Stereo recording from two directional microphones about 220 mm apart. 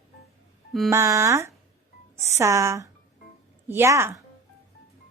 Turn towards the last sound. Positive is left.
turn(degrees=-10)  # may be behind; listen again after turning